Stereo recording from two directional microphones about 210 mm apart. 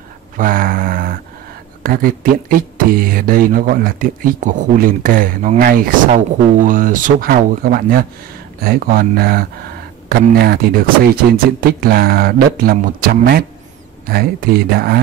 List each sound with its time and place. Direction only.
0.4 s mantra: 40° right (ahead or behind)
1.8 s speech: 45° right (ahead or behind)